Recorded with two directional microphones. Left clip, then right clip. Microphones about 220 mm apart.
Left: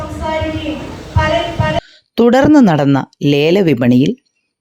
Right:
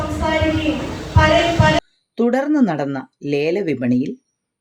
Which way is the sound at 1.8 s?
40° left (ahead or behind).